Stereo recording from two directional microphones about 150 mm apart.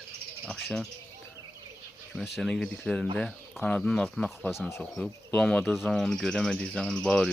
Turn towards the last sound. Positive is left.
turn(degrees=5)  # may be behind; listen again after turning